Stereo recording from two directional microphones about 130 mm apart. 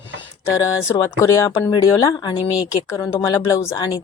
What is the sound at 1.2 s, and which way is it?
Speech, 25° left (ahead or behind).